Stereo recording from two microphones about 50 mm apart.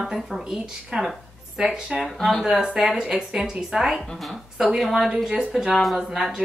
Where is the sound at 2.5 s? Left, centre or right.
Centre.